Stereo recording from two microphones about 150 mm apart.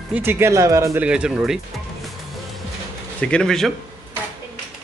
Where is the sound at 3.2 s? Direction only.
5° left (ahead or behind).